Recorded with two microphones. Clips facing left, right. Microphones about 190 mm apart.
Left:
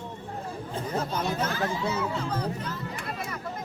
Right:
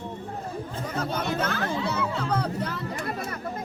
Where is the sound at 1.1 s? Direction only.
60° right (ahead or behind).